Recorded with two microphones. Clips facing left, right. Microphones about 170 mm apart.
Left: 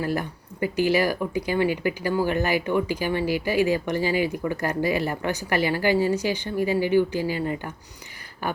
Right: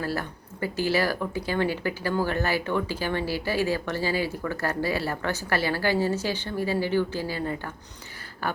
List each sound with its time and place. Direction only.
0.0 s speech: 15° left (ahead or behind)